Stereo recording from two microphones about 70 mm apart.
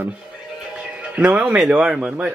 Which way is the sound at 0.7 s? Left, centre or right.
Centre.